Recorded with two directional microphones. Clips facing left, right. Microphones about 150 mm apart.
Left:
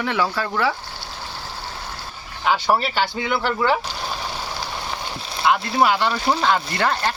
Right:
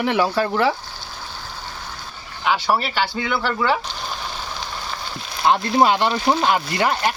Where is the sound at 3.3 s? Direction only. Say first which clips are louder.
Left 1 dB; 10° left (ahead or behind).